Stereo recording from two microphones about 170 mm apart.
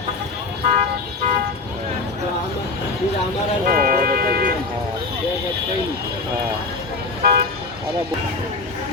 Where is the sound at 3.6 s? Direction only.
60° right (ahead or behind).